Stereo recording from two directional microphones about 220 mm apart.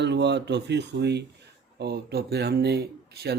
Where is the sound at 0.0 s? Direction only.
50° right (ahead or behind).